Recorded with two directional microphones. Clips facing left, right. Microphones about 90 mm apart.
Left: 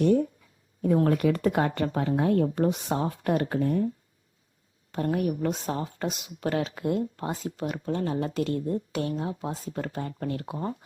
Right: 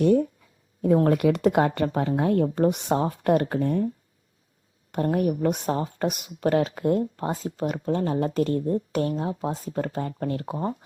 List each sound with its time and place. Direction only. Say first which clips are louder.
0.9 s speech: right 3 dB; 40° right (ahead or behind)
1.2 s speech: right 4 dB; 70° right (ahead or behind)
1.6 s a woman's voice: right 3 dB; 45° right (ahead or behind)
2.6 s speech: right 4 dB; 55° right (ahead or behind)
4.9 s a woman's voice: right 3 dB; 40° right (ahead or behind)